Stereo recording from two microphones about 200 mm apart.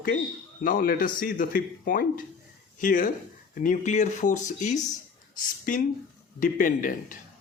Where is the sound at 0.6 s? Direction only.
45° left (ahead or behind).